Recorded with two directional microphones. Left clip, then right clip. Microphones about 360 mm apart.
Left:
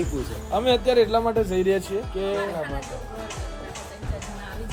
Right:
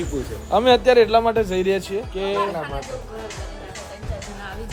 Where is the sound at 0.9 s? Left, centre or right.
Centre.